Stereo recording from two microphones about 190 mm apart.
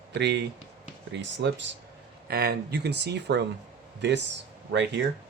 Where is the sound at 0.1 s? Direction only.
65° right (ahead or behind).